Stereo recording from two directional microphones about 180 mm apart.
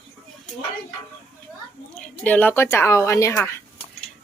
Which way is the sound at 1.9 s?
10° left (ahead or behind).